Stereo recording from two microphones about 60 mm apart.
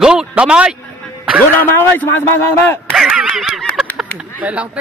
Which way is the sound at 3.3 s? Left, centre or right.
Centre.